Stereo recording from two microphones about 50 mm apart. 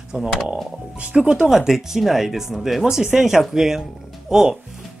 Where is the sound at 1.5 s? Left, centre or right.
Centre.